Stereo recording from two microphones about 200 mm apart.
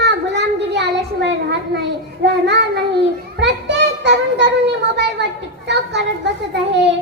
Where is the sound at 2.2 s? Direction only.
60° right (ahead or behind).